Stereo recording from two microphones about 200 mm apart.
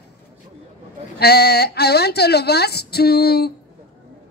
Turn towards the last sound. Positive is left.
turn(degrees=50)  # may be behind; listen again after turning